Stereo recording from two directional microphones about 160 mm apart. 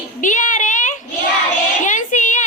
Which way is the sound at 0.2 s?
50° left (ahead or behind).